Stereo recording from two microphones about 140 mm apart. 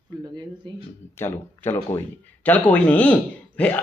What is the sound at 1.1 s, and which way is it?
Speech, 15° left (ahead or behind).